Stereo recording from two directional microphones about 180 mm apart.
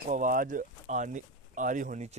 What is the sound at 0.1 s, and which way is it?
Speech, 50° right (ahead or behind).